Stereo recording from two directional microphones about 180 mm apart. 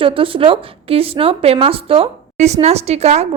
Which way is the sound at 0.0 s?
30° right (ahead or behind).